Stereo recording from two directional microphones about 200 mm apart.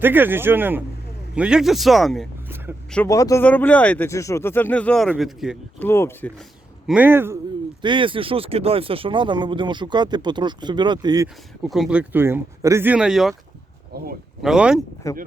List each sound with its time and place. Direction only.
0.0 s speech: 10° right (ahead or behind)
2.9 s speech: 10° left (ahead or behind)
5.8 s speech: 10° left (ahead or behind)
6.8 s speech: 5° right (ahead or behind)
7.8 s speech: 25° right (ahead or behind)
11.6 s speech: centre (ahead or behind)
13.9 s speech: 50° right (ahead or behind)
14.4 s speech: 5° right (ahead or behind)